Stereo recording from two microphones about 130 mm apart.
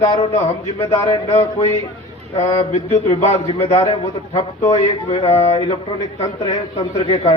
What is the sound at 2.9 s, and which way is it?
Speech, 60° left (ahead or behind).